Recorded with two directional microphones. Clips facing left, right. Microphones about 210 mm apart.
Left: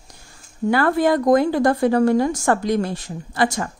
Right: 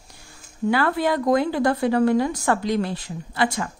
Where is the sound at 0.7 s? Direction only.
45° left (ahead or behind).